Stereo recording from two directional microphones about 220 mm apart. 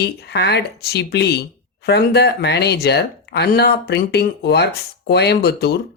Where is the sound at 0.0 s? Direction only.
50° left (ahead or behind).